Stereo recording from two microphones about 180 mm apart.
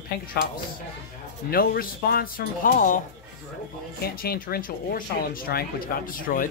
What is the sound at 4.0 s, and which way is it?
Speech, 55° left (ahead or behind).